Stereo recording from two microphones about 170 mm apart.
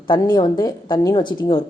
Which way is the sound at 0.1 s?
25° left (ahead or behind).